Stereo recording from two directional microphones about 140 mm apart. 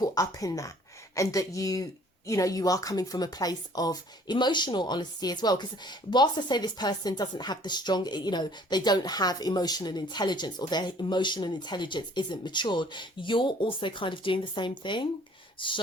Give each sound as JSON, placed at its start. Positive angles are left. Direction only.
{"t": 0.0, "sound": "speech", "side_deg": 25}